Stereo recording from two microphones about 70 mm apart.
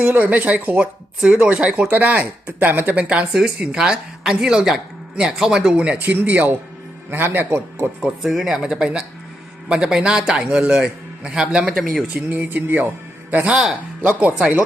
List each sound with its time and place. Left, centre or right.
0.0 s speech: right
1.2 s a man's voice: centre; by 7.9 s right
8.2 s speech: centre
12.3 s speech: right